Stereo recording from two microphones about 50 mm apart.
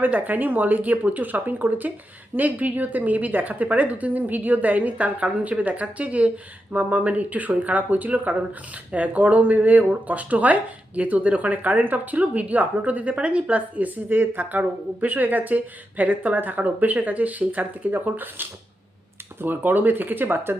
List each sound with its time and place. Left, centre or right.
0.0 s speech: right